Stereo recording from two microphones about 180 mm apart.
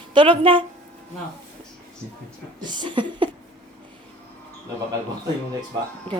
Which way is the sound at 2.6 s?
25° right (ahead or behind).